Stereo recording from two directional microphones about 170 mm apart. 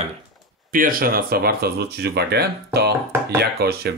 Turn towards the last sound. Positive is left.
turn(degrees=-70)  # may be behind; listen again after turning